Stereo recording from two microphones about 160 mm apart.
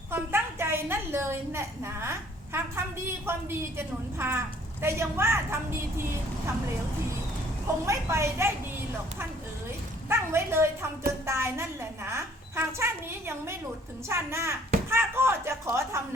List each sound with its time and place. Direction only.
0.1 s a sound: 15° right (ahead or behind)
3.2 s a woman's voice: 15° right (ahead or behind)
7.9 s a woman's voice: 15° right (ahead or behind)
10.1 s a woman's voice: 15° right (ahead or behind)